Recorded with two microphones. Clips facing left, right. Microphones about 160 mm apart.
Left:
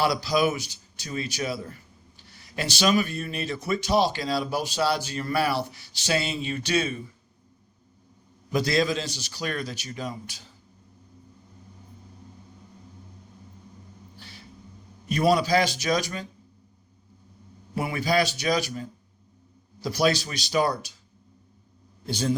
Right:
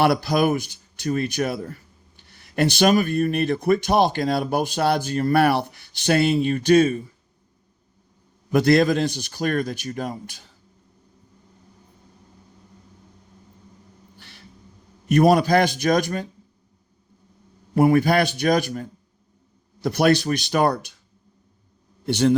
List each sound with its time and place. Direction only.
0.0 s speech: 55° right (ahead or behind)
8.5 s a man's voice: 60° right (ahead or behind)
15.1 s speech: 55° right (ahead or behind)
17.7 s speech: 50° right (ahead or behind)
22.0 s a man's voice: 65° right (ahead or behind)